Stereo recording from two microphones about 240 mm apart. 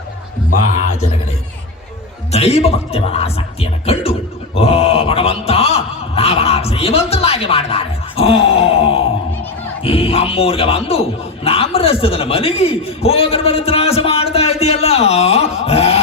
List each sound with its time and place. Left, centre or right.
2.3 s speech: left
4.5 s a sound: left
9.8 s a man's voice: left